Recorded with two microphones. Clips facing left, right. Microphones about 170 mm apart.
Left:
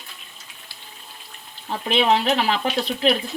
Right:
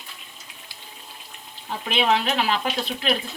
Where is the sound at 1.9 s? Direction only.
35° left (ahead or behind).